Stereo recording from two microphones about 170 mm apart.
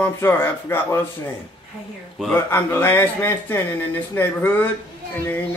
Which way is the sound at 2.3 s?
15° left (ahead or behind).